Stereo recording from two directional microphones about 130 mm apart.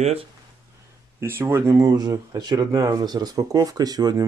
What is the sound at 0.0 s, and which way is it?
Speech, 50° right (ahead or behind).